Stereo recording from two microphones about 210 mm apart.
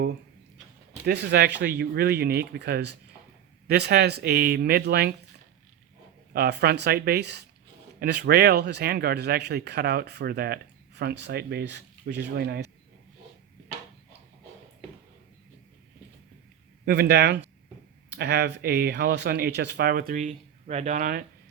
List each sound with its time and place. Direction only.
1.0 s speech: 55° right (ahead or behind)
6.3 s speech: 50° right (ahead or behind)
16.8 s speech: 50° right (ahead or behind)